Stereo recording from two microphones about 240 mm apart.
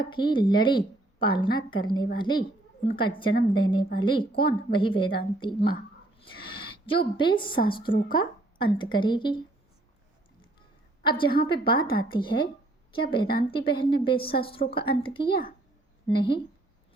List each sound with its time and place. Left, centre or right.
0.0 s a woman's voice: centre
6.8 s a woman's voice: left
11.0 s a woman's voice: centre